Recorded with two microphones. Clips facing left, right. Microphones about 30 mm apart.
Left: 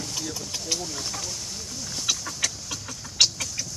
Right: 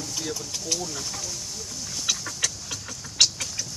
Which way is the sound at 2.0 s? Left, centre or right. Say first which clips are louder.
Even; centre.